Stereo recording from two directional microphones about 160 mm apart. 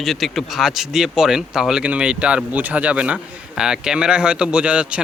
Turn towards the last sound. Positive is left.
turn(degrees=-5)  # may be behind; listen again after turning